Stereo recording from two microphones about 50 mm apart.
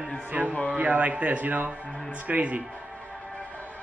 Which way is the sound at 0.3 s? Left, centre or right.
Right.